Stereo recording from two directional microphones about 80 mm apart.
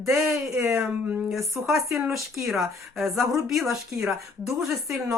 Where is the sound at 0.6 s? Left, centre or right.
Right.